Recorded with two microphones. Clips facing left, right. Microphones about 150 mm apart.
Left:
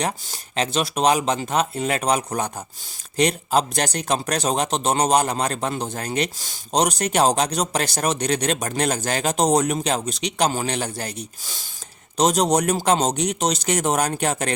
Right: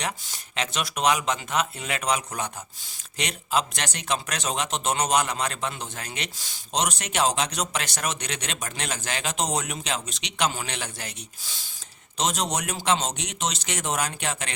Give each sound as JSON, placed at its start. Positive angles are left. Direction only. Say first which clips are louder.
{"t": 0.0, "sound": "speech", "louder": "left 6 dB", "side_deg": 35}